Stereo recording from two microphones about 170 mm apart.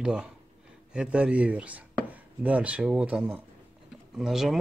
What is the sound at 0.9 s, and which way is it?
Chopping, 5° right (ahead or behind).